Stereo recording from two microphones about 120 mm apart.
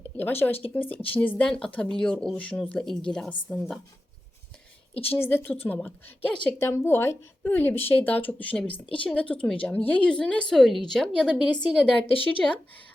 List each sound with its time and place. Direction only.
0.2 s a woman's voice: 15° left (ahead or behind); by 3.8 s centre (ahead or behind)
5.0 s a woman's voice: 15° left (ahead or behind)
12.0 s speech: 50° left (ahead or behind)
12.4 s a woman's voice: 10° left (ahead or behind)